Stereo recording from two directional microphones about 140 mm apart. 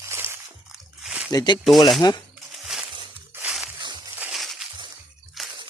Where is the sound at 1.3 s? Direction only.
30° left (ahead or behind).